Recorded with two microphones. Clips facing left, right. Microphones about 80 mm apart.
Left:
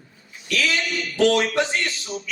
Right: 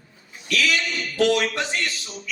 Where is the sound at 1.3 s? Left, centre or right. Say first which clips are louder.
Left 2 dB; left.